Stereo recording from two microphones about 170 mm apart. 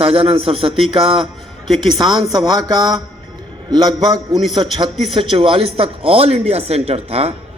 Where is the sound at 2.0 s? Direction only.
25° right (ahead or behind).